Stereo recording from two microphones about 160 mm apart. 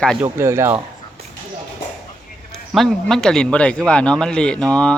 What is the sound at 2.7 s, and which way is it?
Speech, 5° left (ahead or behind).